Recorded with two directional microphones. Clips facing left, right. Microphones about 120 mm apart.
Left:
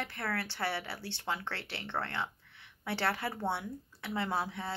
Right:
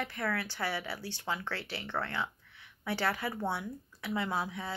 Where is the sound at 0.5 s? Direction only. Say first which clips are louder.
Even; 30° left (ahead or behind).